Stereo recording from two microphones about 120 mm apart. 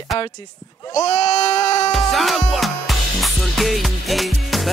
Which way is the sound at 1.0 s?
65° left (ahead or behind).